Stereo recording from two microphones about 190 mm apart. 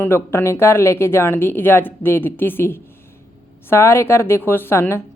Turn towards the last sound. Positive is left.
turn(degrees=15)  # may be behind; listen again after turning